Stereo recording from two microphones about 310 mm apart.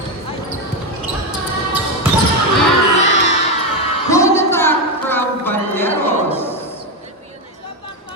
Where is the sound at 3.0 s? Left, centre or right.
Left.